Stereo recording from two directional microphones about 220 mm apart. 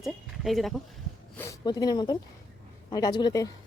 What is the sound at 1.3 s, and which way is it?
Speech, 15° left (ahead or behind).